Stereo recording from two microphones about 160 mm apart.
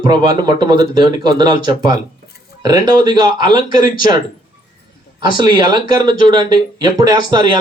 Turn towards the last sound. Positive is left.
turn(degrees=-30)  # may be behind; listen again after turning